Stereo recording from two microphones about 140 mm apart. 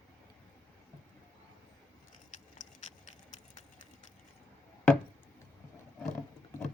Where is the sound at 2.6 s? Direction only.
65° left (ahead or behind).